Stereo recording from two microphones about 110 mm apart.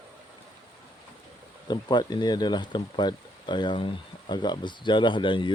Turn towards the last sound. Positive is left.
turn(degrees=50)  # may be behind; listen again after turning